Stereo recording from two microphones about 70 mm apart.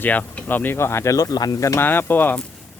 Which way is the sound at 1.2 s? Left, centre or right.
Left.